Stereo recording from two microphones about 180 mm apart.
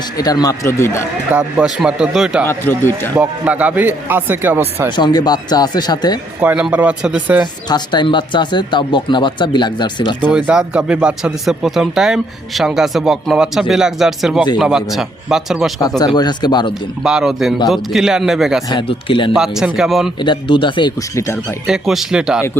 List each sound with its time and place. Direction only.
0.2 s speech: 20° left (ahead or behind)
1.3 s speech: 5° right (ahead or behind)
2.5 s a man's voice: 10° left (ahead or behind)
3.2 s a man's voice: 5° right (ahead or behind)
4.9 s speech: 25° left (ahead or behind)
6.4 s a man's voice: 10° right (ahead or behind)
7.7 s speech: 25° left (ahead or behind)
10.3 s speech: 5° right (ahead or behind)
16.1 s speech: 25° left (ahead or behind)
17.0 s speech: 5° right (ahead or behind)
18.7 s speech: 30° left (ahead or behind)
19.3 s speech: 5° right (ahead or behind)
20.2 s speech: 25° left (ahead or behind)
21.7 s speech: centre (ahead or behind)